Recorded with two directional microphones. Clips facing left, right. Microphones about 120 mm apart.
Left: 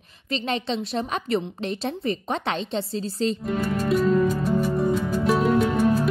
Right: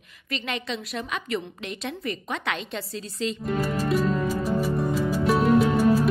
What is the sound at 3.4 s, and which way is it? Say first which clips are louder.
Music: left 1 dB; centre (ahead or behind).